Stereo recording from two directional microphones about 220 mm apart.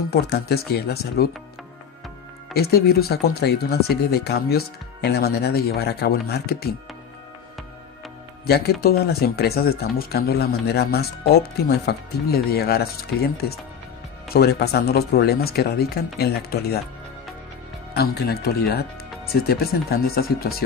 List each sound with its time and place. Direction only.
0.1 s speech: 45° left (ahead or behind)
2.5 s speech: 45° left (ahead or behind)
8.5 s speech: 45° left (ahead or behind)
14.3 s speech: 45° left (ahead or behind)
17.9 s speech: 45° left (ahead or behind)